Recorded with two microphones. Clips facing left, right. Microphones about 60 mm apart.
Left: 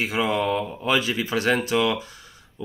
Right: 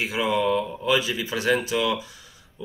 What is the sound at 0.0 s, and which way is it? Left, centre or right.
Speech, left.